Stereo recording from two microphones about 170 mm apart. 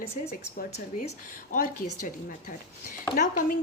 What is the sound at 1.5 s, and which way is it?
Speech, 50° left (ahead or behind).